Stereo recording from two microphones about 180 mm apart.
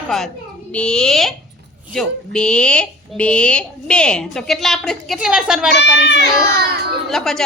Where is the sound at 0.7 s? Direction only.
5° left (ahead or behind).